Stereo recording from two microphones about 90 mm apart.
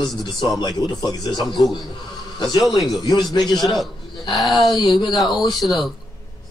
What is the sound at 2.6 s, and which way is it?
Speech, centre (ahead or behind).